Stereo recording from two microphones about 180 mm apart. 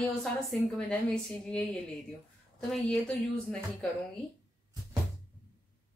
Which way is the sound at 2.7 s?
5° left (ahead or behind).